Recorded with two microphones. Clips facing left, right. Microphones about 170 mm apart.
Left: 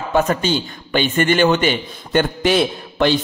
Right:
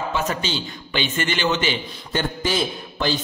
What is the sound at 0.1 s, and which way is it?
A man's voice, 55° left (ahead or behind).